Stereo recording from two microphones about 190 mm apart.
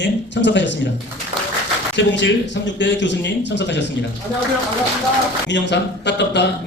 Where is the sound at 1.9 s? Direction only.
70° left (ahead or behind).